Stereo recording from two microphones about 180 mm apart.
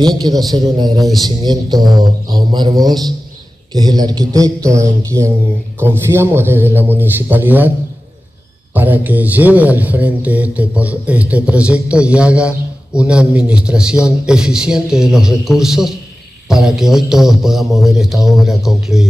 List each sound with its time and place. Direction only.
0.0 s speech: 20° right (ahead or behind)
8.7 s a man's voice: 10° right (ahead or behind)